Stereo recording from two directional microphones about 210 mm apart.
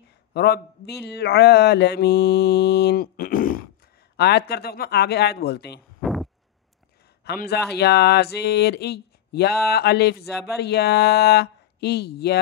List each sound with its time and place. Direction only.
0.3 s speech: 50° left (ahead or behind)
5.9 s a sound: centre (ahead or behind)
7.2 s speech: 50° left (ahead or behind)